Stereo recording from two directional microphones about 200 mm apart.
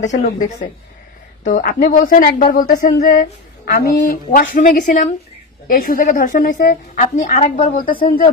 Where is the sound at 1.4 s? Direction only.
45° left (ahead or behind).